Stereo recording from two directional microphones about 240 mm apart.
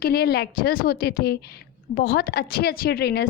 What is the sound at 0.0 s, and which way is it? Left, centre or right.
A woman's voice, left.